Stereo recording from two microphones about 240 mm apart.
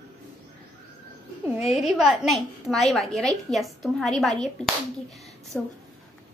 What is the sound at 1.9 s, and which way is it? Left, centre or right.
A woman's voice, centre.